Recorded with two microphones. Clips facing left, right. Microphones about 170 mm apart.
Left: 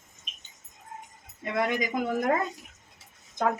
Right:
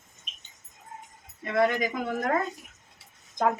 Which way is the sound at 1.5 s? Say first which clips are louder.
Right 3 dB; 15° left (ahead or behind).